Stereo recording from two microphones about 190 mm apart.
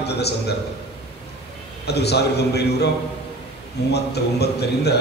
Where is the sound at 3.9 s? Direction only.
60° left (ahead or behind).